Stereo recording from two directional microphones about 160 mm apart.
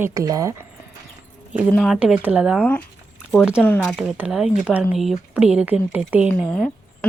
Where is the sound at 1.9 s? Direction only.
5° right (ahead or behind).